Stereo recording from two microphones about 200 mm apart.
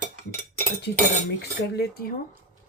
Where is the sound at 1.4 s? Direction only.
50° left (ahead or behind).